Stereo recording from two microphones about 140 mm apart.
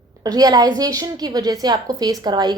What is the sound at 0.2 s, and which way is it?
A woman's voice, 25° right (ahead or behind).